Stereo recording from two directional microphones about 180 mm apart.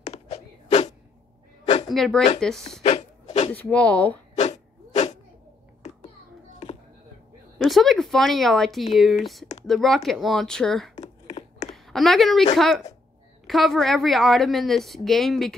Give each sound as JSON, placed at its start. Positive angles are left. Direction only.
{"t": 0.0, "sound": "a sound", "side_deg": 35}
{"t": 1.9, "sound": "a woman's voice", "side_deg": 0}
{"t": 2.8, "sound": "a sound", "side_deg": 40}
{"t": 3.5, "sound": "speech", "side_deg": 10}
{"t": 4.4, "sound": "dog", "side_deg": 40}
{"t": 7.5, "sound": "a woman's voice", "side_deg": 0}